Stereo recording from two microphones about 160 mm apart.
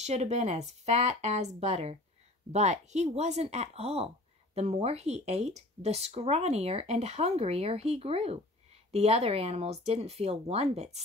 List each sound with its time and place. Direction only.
0.0 s speech: 45° right (ahead or behind)